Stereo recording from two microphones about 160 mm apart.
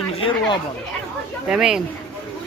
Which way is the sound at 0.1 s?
35° left (ahead or behind).